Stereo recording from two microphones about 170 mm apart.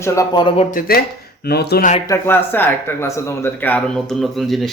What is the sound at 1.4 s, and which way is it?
Speech, 70° left (ahead or behind).